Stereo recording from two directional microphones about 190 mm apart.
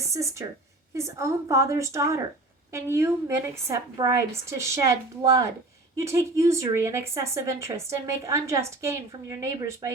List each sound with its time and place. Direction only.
0.0 s a woman's voice: 15° right (ahead or behind)